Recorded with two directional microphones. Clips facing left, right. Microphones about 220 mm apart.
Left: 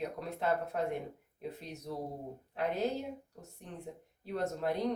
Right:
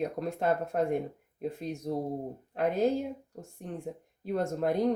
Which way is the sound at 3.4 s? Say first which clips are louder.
Right 7 dB; 50° right (ahead or behind).